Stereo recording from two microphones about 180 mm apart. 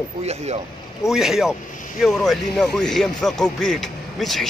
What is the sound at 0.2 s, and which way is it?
Speech, 35° right (ahead or behind).